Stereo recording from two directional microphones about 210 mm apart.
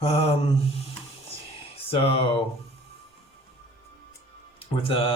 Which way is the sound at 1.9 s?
25° left (ahead or behind).